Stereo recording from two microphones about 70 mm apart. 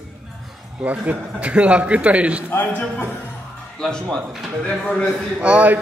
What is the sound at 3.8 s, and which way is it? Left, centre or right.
Speech, centre.